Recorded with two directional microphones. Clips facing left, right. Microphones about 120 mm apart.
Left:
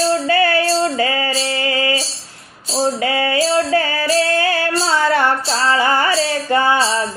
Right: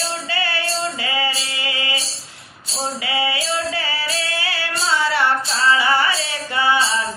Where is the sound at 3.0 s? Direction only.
45° left (ahead or behind).